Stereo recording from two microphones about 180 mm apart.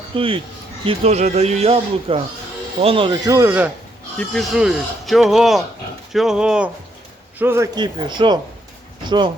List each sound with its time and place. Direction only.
0.1 s a man's voice: 30° right (ahead or behind); by 3.7 s 15° right (ahead or behind)
4.2 s a man's voice: centre (ahead or behind); by 9.3 s 25° right (ahead or behind)